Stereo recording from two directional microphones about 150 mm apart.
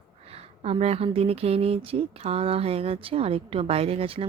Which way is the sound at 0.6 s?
45° right (ahead or behind).